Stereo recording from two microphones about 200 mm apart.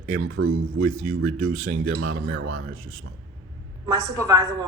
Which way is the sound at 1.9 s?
60° right (ahead or behind).